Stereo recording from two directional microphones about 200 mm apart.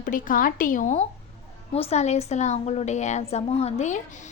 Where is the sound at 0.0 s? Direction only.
45° left (ahead or behind).